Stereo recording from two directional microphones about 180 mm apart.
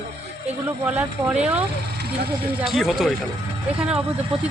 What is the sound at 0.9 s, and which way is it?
Speech, 5° right (ahead or behind).